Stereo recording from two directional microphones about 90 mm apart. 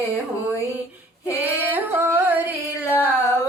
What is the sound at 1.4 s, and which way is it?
Singing, 20° right (ahead or behind).